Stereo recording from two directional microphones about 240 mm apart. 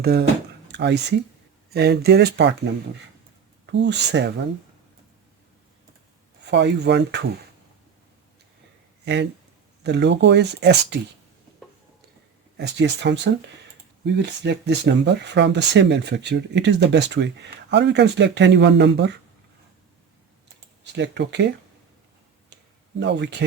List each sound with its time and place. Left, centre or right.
0.0 s speech: right
3.7 s speech: right
6.4 s speech: right
9.8 s speech: right
12.5 s speech: right
20.9 s speech: right
23.0 s speech: right